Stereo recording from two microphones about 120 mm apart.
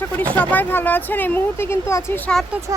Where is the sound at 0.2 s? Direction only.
15° left (ahead or behind).